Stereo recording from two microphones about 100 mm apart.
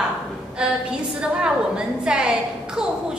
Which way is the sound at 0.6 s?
10° right (ahead or behind).